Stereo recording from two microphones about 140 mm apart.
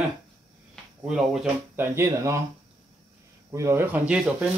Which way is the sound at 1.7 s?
20° right (ahead or behind).